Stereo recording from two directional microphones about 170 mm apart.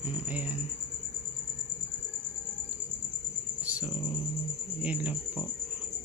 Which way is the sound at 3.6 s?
10° right (ahead or behind).